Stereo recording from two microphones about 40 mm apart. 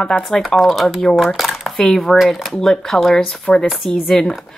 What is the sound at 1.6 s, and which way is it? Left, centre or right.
Speech, centre.